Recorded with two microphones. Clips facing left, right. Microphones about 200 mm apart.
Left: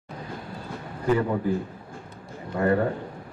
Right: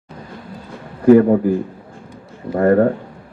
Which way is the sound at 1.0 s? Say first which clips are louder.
Right 14 dB; 55° right (ahead or behind).